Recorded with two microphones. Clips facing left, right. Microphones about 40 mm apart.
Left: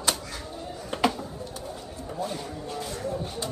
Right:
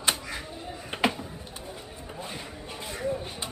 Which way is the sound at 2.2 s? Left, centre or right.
Right.